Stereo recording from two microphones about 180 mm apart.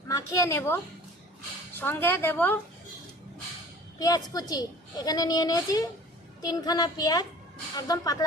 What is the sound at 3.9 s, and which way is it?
Speech, 20° left (ahead or behind).